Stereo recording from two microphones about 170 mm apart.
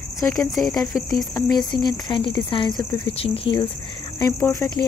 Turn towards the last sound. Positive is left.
turn(degrees=15)  # may be behind; listen again after turning